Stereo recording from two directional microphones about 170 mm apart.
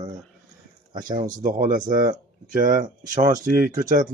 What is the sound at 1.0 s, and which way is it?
Speech, 50° right (ahead or behind).